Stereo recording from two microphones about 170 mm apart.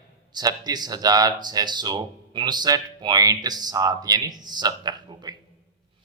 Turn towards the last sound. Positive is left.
turn(degrees=-25)  # may be behind; listen again after turning